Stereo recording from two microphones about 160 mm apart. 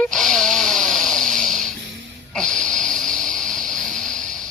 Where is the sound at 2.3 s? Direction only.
5° left (ahead or behind).